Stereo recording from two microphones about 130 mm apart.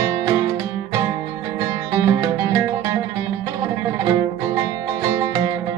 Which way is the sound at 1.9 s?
25° right (ahead or behind).